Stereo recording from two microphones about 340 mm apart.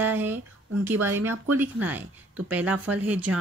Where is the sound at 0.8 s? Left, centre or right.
Centre.